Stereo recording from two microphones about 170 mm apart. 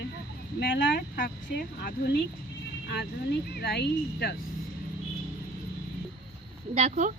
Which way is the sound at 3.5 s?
75° left (ahead or behind).